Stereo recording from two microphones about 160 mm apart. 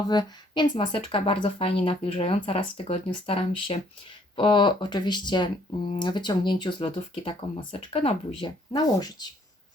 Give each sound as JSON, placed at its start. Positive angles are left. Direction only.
{"t": 0.1, "sound": "speech", "side_deg": 25}